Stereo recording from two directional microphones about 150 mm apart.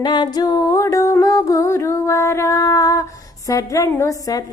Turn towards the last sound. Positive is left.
turn(degrees=20)  # may be behind; listen again after turning